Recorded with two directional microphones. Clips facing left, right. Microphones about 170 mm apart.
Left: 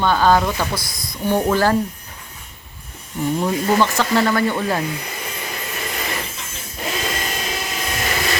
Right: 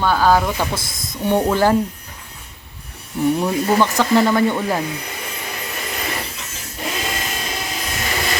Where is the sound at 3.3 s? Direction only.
10° right (ahead or behind).